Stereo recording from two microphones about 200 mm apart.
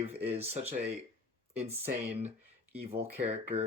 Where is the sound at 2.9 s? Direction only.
30° right (ahead or behind).